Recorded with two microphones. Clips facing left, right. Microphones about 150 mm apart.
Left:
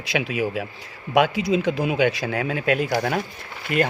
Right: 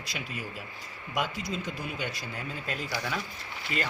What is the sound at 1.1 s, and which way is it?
Speech, 75° left (ahead or behind).